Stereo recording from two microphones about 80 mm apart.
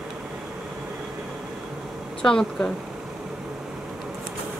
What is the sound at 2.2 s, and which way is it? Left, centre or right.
Speech, centre.